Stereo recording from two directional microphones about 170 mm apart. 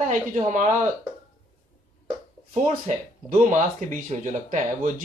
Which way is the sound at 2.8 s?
45° right (ahead or behind).